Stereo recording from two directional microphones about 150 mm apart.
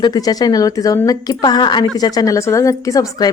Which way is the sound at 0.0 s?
25° left (ahead or behind).